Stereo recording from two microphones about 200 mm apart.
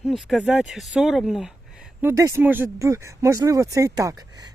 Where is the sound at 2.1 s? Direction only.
15° right (ahead or behind).